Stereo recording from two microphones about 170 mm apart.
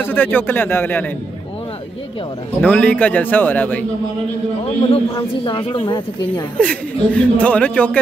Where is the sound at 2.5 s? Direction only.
5° left (ahead or behind).